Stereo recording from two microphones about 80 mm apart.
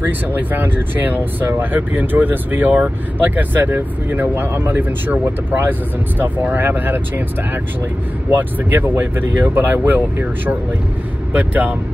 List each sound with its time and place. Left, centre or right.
0.0 s speech: right